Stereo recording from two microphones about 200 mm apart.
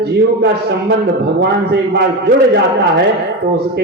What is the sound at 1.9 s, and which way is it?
Speech, 55° right (ahead or behind).